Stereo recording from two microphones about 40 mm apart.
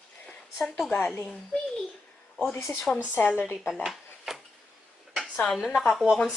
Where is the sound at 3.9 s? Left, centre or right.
Centre.